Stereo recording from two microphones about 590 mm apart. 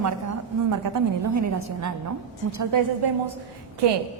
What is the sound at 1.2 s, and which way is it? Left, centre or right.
A woman's voice, right.